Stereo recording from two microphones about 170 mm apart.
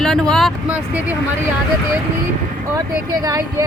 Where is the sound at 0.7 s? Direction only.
10° right (ahead or behind).